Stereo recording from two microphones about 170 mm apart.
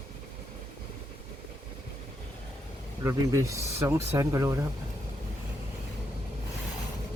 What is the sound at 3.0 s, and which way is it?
Speech, 20° right (ahead or behind).